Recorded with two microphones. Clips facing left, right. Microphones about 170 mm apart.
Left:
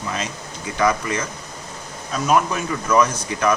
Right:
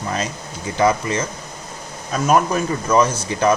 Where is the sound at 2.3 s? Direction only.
40° right (ahead or behind).